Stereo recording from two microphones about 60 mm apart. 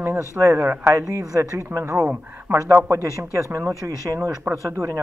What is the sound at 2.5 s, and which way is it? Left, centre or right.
Speech, right.